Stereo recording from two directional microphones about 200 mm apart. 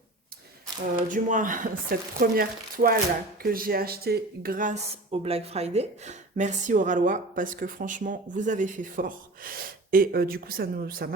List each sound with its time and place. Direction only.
1.0 s speech: 40° right (ahead or behind)